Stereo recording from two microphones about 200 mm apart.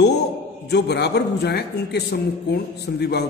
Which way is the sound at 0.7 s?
55° left (ahead or behind).